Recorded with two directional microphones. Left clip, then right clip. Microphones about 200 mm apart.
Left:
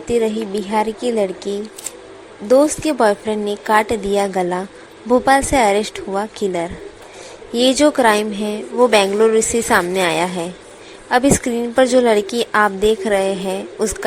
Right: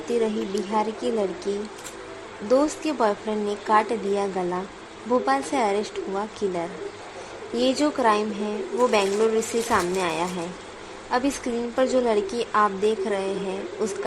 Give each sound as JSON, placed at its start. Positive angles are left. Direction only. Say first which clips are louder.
{"t": 0.1, "sound": "a woman's voice", "louder": "left 7 dB", "side_deg": 20}
{"t": 2.5, "sound": "a woman's voice", "louder": "left 8 dB", "side_deg": 20}